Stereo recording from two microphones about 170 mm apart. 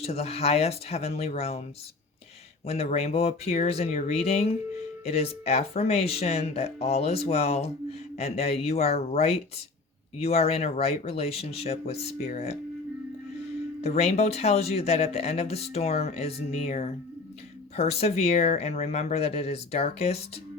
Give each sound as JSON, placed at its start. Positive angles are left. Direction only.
{"t": 0.0, "sound": "speech", "side_deg": 35}
{"t": 2.6, "sound": "speech", "side_deg": 35}
{"t": 13.8, "sound": "speech", "side_deg": 40}